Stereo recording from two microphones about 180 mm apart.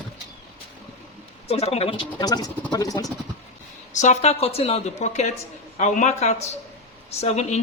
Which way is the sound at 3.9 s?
40° left (ahead or behind).